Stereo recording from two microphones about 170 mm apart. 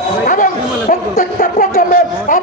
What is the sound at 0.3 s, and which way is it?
A man's voice, 55° left (ahead or behind).